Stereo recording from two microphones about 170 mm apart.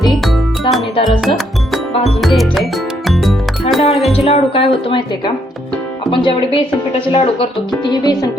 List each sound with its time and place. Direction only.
0.0 s music: centre (ahead or behind)
0.9 s speech: 30° left (ahead or behind)
1.2 s music: centre (ahead or behind)
1.9 s music: 35° left (ahead or behind)
2.2 s music: centre (ahead or behind)
4.1 s speech: 35° left (ahead or behind)
6.1 s speech: 30° left (ahead or behind)
7.9 s speech: 25° left (ahead or behind)